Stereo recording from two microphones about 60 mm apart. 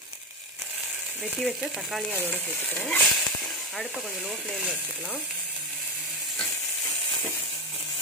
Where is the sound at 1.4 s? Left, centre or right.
Centre.